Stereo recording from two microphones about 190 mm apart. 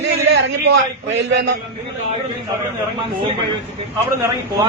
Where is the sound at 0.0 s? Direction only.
70° right (ahead or behind).